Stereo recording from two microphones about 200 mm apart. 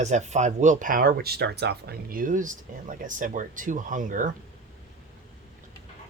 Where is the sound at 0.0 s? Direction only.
35° right (ahead or behind).